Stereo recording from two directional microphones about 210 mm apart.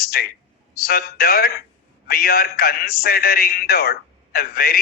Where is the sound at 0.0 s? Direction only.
45° left (ahead or behind).